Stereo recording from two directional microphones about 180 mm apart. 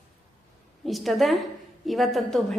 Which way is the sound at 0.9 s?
Centre (ahead or behind).